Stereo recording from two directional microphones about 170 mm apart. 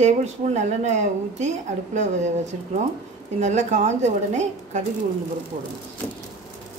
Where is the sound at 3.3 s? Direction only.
45° right (ahead or behind).